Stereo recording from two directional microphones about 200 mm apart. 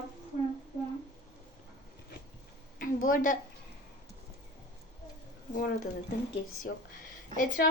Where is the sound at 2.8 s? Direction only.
45° left (ahead or behind).